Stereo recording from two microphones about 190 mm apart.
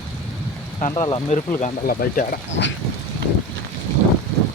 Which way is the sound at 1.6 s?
45° left (ahead or behind).